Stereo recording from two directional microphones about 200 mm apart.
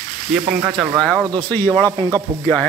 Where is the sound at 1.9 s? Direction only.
15° right (ahead or behind).